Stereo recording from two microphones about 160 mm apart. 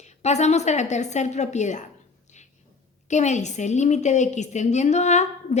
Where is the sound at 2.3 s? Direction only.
45° left (ahead or behind).